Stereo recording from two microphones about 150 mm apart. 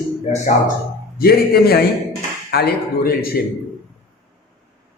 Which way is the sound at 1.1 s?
90° left.